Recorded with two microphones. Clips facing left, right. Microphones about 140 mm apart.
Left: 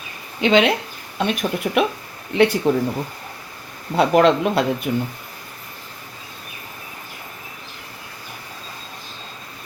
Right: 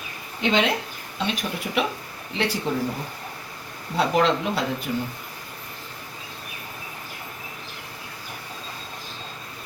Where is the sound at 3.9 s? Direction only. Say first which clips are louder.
Left 6 dB; 60° left (ahead or behind).